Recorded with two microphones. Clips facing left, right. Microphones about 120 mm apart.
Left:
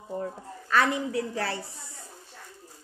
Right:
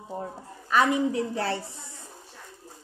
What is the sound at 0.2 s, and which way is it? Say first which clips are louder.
A woman's voice: left 2 dB; 15° right (ahead or behind).